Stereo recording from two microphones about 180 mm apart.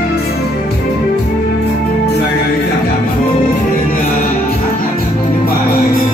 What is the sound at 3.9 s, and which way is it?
Music, 50° left (ahead or behind).